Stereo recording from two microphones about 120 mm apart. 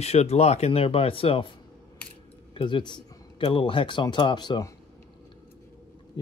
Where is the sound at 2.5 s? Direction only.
40° left (ahead or behind).